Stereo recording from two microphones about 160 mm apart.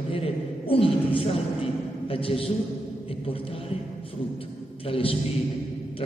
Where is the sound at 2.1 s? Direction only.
35° left (ahead or behind).